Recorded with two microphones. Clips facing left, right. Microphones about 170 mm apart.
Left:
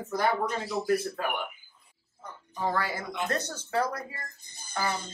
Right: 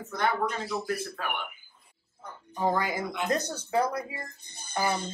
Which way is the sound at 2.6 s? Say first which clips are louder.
Right 3 dB; 15° right (ahead or behind).